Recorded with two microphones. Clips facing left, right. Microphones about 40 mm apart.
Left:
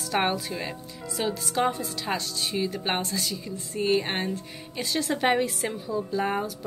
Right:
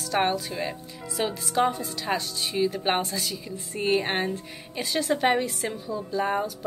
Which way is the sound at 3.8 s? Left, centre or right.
Centre.